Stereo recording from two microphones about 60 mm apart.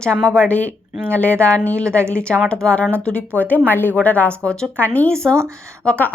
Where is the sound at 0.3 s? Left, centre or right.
Left.